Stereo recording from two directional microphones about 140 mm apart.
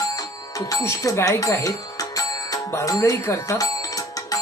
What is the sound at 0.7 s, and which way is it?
Speech, 20° left (ahead or behind).